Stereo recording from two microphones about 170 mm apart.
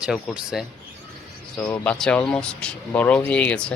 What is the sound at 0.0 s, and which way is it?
Speech, 5° right (ahead or behind).